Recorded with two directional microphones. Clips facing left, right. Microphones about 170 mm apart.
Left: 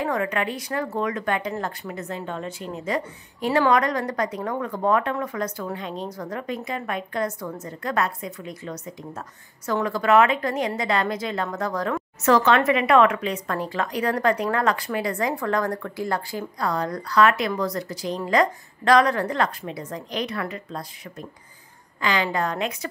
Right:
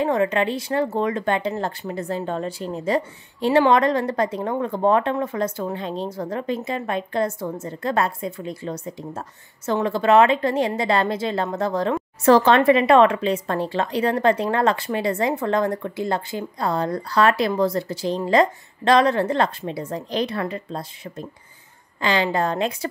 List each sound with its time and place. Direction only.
0.0 s a woman's voice: 25° right (ahead or behind)